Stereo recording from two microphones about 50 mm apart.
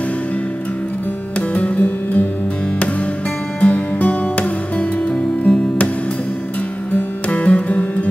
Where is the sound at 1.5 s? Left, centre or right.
Left.